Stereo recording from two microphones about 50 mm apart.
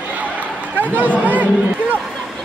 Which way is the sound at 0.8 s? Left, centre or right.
Right.